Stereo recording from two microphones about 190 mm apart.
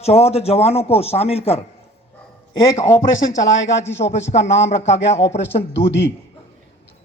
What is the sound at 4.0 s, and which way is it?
Speech, 35° left (ahead or behind).